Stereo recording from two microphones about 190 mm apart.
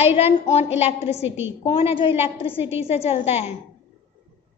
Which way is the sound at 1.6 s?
30° left (ahead or behind).